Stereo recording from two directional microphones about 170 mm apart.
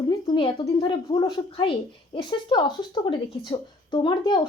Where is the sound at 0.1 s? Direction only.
30° left (ahead or behind).